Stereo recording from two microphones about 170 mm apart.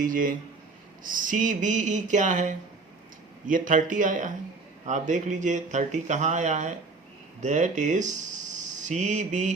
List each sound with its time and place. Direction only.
0.0 s speech: 50° right (ahead or behind)